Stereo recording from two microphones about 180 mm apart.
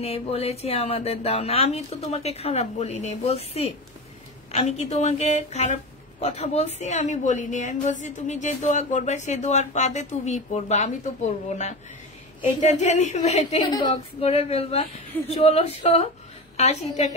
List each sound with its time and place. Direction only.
0.0 s a woman's voice: 35° left (ahead or behind)
13.7 s a woman's voice: 25° left (ahead or behind)
14.2 s a woman's voice: 35° left (ahead or behind)